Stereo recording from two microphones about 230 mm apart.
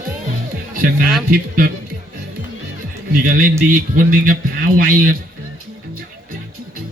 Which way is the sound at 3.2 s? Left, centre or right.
Right.